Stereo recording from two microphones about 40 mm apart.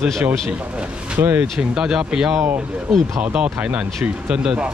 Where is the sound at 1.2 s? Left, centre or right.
Right.